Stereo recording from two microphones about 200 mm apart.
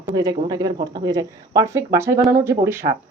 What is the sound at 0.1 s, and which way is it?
Speech, 20° right (ahead or behind).